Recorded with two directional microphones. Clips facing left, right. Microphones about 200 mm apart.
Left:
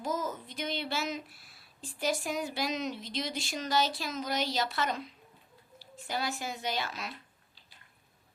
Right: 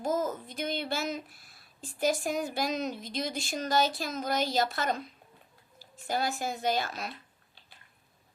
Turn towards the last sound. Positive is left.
turn(degrees=-45)  # may be behind; listen again after turning